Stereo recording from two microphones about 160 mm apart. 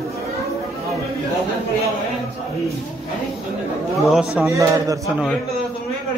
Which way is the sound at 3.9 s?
Centre (ahead or behind).